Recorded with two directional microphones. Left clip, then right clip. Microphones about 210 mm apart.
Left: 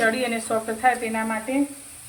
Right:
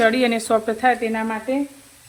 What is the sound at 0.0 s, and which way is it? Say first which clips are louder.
Speech: right 5 dB; 60° right (ahead or behind).